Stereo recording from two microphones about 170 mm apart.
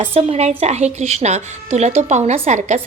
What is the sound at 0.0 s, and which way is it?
A woman's voice, 40° right (ahead or behind).